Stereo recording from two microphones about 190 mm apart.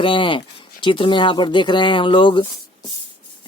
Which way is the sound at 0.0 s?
25° left (ahead or behind).